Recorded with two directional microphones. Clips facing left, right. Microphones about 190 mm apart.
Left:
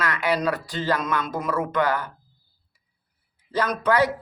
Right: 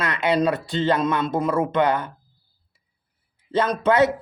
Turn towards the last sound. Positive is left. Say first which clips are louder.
# right 3 dB
turn(degrees=-25)  # may be behind; listen again after turning